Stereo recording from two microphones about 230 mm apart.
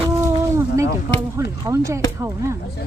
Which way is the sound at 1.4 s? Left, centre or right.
Centre.